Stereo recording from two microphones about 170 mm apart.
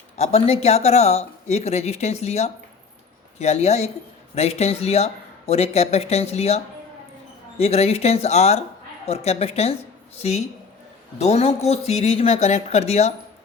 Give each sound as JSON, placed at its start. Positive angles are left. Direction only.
{"t": 0.2, "sound": "speech", "side_deg": 40}
{"t": 7.6, "sound": "speech", "side_deg": 35}